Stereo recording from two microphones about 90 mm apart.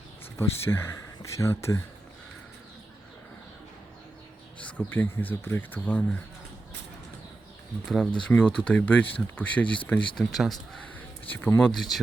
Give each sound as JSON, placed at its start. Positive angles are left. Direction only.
{"t": 0.3, "sound": "speech", "side_deg": 25}
{"t": 4.6, "sound": "speech", "side_deg": 15}
{"t": 7.9, "sound": "speech", "side_deg": 5}
{"t": 10.2, "sound": "speech", "side_deg": 0}
{"t": 11.3, "sound": "speech", "side_deg": 20}
{"t": 11.7, "sound": "speech", "side_deg": 0}